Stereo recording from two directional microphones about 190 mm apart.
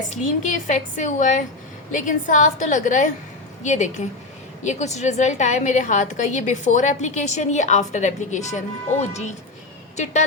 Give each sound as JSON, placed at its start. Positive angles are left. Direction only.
{"t": 0.1, "sound": "a woman's voice", "side_deg": 40}